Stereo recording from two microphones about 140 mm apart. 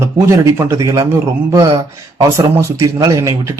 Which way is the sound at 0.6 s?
25° right (ahead or behind).